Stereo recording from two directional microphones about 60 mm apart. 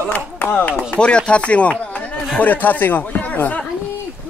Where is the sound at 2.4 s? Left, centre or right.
Left.